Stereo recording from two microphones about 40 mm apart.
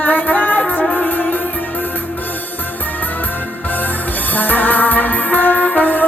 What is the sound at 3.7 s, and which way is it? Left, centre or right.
Music, left.